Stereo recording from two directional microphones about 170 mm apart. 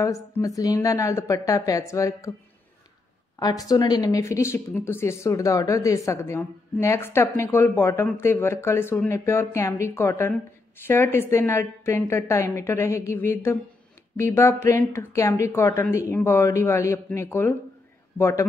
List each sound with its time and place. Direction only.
0.0 s a woman's voice: 20° left (ahead or behind)
3.3 s a man's voice: 20° left (ahead or behind)